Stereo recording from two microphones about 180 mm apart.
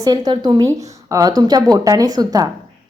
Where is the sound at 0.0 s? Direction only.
20° right (ahead or behind).